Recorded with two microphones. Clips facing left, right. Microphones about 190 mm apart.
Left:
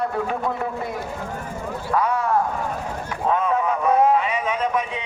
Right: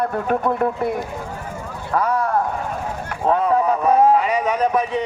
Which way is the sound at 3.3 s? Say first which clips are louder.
Right 4 dB; 35° right (ahead or behind).